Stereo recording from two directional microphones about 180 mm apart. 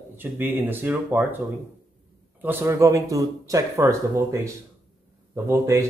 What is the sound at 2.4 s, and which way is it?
Speech, 15° right (ahead or behind).